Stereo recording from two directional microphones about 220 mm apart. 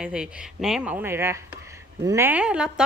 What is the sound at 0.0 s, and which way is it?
Speech, 5° right (ahead or behind).